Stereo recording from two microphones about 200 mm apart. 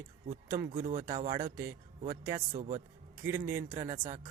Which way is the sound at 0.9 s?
25° right (ahead or behind).